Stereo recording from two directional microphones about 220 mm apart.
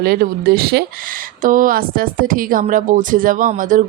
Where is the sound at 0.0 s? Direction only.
45° right (ahead or behind).